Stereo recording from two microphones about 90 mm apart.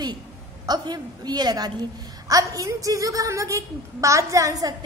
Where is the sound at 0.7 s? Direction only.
50° right (ahead or behind).